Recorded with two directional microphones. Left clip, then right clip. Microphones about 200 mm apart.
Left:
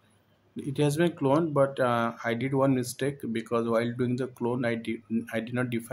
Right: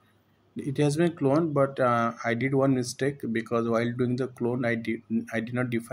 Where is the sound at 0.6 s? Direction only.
5° right (ahead or behind).